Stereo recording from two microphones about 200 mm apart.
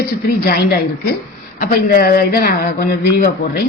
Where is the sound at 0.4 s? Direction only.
45° left (ahead or behind).